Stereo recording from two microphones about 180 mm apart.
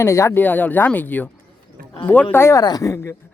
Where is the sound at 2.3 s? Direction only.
15° left (ahead or behind).